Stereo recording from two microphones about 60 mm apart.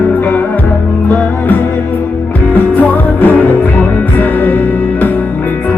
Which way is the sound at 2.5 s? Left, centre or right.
Left.